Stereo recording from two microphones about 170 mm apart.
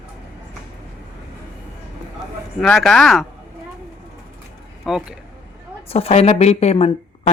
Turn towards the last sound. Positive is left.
turn(degrees=40)  # may be behind; listen again after turning